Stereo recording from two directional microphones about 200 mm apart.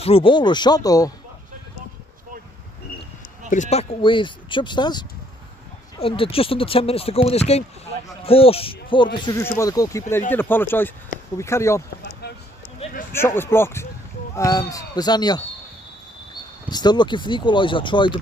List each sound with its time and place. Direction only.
0.0 s speech: 25° left (ahead or behind)
3.4 s speech: 35° left (ahead or behind); by 11.8 s 15° left (ahead or behind)
13.1 s speech: 10° left (ahead or behind)
16.7 s speech: 20° left (ahead or behind)